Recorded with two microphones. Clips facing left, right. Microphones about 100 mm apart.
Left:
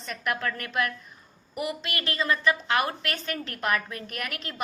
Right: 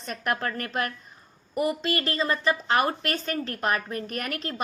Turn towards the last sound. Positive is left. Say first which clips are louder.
# right 4 dB
turn(degrees=-40)  # may be behind; listen again after turning